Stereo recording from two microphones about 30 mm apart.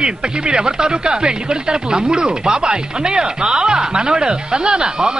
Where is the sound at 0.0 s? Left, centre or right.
Right.